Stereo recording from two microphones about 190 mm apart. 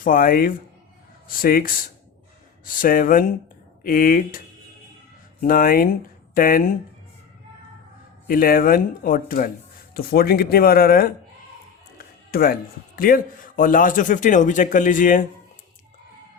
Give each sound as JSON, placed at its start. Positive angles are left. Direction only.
{"t": 0.0, "sound": "a man's voice", "side_deg": 45}
{"t": 8.3, "sound": "a man's voice", "side_deg": 50}
{"t": 11.9, "sound": "music", "side_deg": 50}
{"t": 13.0, "sound": "a man's voice", "side_deg": 50}